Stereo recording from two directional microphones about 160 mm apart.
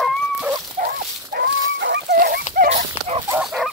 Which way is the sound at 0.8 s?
80° right.